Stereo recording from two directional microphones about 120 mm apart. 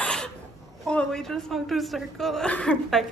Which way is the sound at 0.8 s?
5° left (ahead or behind).